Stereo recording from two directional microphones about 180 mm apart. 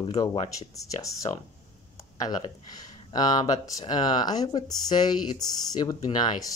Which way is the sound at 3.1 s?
20° left (ahead or behind).